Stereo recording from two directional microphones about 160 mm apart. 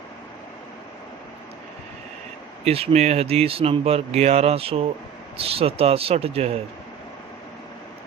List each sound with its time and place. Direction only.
2.6 s speech: 40° right (ahead or behind)